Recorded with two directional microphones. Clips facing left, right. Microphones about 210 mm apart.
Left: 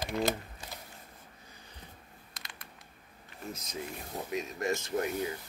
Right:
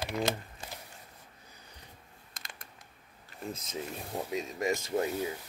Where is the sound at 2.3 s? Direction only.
45° right (ahead or behind).